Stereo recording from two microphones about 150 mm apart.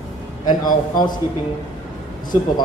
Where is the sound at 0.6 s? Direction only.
30° left (ahead or behind).